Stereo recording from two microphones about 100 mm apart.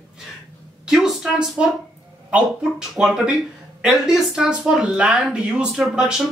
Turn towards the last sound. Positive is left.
turn(degrees=-5)  # may be behind; listen again after turning